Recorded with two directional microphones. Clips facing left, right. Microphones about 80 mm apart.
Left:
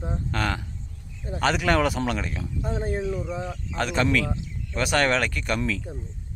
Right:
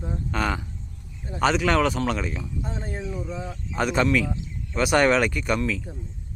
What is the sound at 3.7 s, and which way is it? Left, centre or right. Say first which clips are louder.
Speech: right 2 dB; centre.